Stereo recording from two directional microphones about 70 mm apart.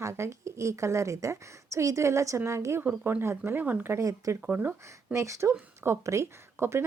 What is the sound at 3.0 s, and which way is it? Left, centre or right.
Speech, right.